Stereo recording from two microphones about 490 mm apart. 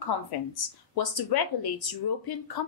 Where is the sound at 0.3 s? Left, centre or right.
Left.